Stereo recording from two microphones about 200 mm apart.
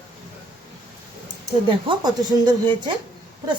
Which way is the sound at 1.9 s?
20° right (ahead or behind).